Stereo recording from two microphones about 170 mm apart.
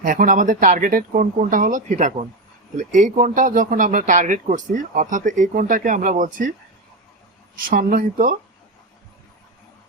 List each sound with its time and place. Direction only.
0.0 s speech: 50° right (ahead or behind)
7.5 s speech: 55° right (ahead or behind)